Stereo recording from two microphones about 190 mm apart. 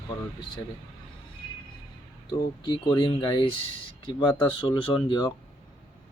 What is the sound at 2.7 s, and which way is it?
Speech, 25° left (ahead or behind).